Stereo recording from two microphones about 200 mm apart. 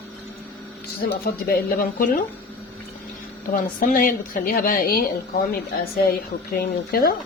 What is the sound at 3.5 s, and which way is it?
A woman's voice, 40° left (ahead or behind).